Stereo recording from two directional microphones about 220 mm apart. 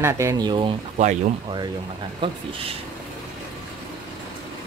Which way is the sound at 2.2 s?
25° right (ahead or behind).